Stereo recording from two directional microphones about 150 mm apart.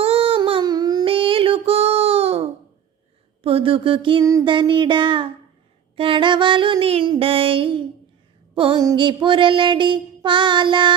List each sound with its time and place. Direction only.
0.0 s child singing: 40° right (ahead or behind)
3.4 s a sound: 40° right (ahead or behind)
4.2 s child singing: 25° right (ahead or behind)